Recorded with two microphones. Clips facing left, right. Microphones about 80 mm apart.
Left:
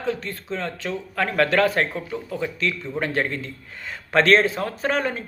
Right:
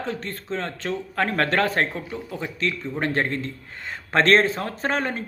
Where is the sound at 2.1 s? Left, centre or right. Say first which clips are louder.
Left 3 dB; right.